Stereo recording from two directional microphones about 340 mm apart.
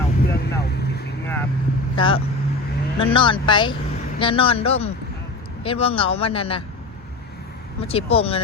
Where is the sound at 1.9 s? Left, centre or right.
Centre.